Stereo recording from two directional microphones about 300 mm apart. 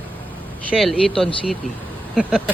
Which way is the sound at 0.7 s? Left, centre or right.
Centre.